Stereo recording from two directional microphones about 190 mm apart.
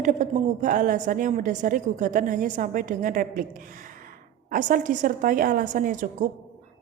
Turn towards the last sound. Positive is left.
turn(degrees=-45)  # may be behind; listen again after turning